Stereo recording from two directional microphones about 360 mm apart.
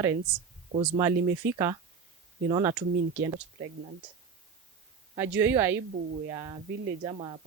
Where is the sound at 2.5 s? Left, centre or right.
Centre.